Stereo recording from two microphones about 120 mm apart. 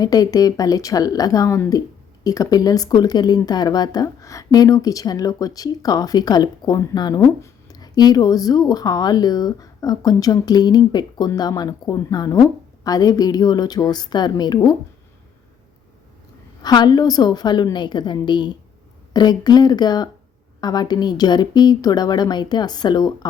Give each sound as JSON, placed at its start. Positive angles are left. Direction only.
{"t": 0.0, "sound": "a woman's voice", "side_deg": 30}
{"t": 16.6, "sound": "speech", "side_deg": 35}